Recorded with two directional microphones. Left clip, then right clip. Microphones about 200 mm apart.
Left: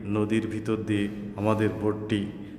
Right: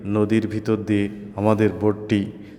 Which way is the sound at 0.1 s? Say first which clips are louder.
Right 6 dB; 30° right (ahead or behind).